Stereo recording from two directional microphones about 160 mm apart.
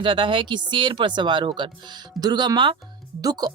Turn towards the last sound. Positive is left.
turn(degrees=-25)  # may be behind; listen again after turning